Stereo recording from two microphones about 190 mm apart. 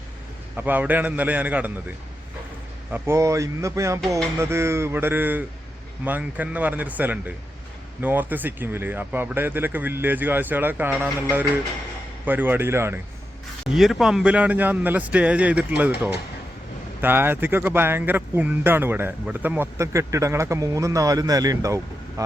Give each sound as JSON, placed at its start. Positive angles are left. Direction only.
{"t": 0.5, "sound": "speech", "side_deg": -10}
{"t": 2.9, "sound": "speech", "side_deg": -15}
{"t": 13.7, "sound": "speech", "side_deg": 0}
{"t": 17.0, "sound": "speech", "side_deg": -10}